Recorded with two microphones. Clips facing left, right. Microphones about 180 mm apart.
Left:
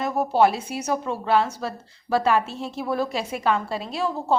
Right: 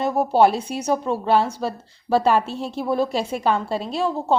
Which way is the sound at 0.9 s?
30° right (ahead or behind).